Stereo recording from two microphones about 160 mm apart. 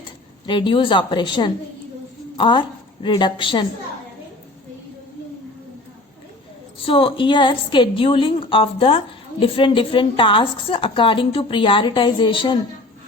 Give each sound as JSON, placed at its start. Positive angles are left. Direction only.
{"t": 0.4, "sound": "a woman's voice", "side_deg": 30}
{"t": 6.8, "sound": "speech", "side_deg": 35}